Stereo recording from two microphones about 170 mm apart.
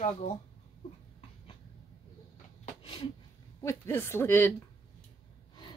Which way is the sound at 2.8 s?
30° left (ahead or behind).